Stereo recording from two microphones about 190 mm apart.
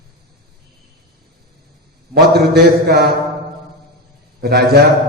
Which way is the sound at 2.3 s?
55° right (ahead or behind).